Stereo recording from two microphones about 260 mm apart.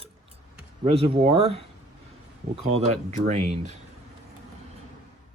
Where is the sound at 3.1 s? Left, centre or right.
Right.